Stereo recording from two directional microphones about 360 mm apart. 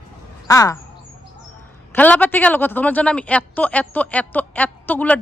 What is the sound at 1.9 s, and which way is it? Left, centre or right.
A man's voice, centre.